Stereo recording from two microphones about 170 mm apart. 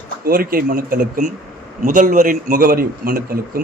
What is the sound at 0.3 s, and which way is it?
A man's voice, 60° right (ahead or behind).